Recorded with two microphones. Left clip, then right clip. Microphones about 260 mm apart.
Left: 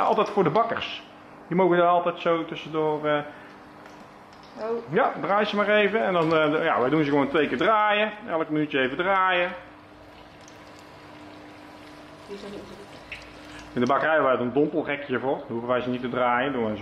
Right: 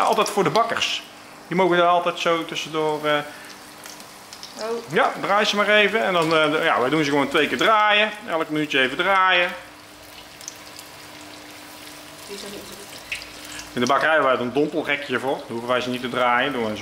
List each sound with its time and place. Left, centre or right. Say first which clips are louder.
0.0 s speech: right 3 dB; centre
4.6 s frying: right 2 dB; centre
4.9 s speech: right 3 dB; centre
12.3 s water tap: right 3 dB; centre
13.7 s speech: right 3 dB; centre
14.6 s frying: right 1 dB; left
14.9 s speech: right 4 dB; centre